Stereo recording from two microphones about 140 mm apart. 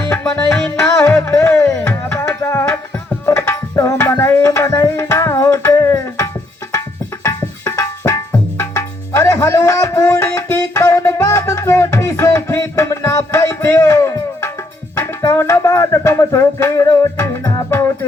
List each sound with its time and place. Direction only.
0.5 s music: 5° left (ahead or behind)
1.5 s music: 20° left (ahead or behind)
1.8 s music: 10° left (ahead or behind)
3.2 s tabla: 15° left (ahead or behind)
7.3 s music: 20° left (ahead or behind)